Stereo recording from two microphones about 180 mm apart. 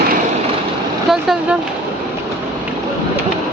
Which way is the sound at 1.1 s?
Centre (ahead or behind).